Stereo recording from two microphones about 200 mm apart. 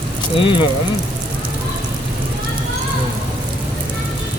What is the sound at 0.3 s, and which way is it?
Speech, 25° left (ahead or behind).